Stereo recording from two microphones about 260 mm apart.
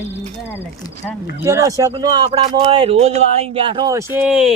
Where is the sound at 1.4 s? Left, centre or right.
Centre.